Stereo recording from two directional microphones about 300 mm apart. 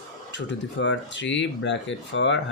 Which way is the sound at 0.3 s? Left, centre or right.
Left.